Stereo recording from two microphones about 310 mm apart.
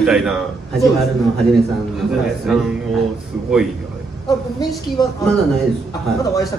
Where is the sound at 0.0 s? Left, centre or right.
Centre.